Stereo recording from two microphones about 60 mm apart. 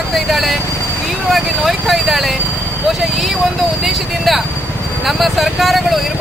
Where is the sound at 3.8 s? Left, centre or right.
Centre.